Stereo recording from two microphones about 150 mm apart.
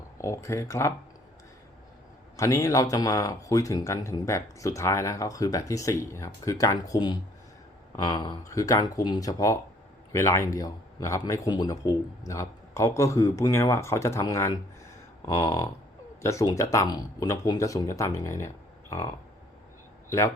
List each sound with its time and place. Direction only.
0.2 s speech: 20° left (ahead or behind)
2.3 s a man's voice: 20° left (ahead or behind)